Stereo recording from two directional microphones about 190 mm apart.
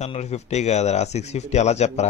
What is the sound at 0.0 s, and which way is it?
Speech, 35° left (ahead or behind).